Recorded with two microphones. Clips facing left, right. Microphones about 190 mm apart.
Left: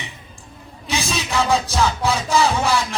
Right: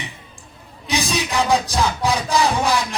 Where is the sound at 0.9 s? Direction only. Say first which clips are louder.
Right 2 dB; 15° right (ahead or behind).